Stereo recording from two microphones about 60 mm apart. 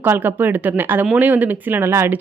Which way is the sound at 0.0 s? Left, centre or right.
Right.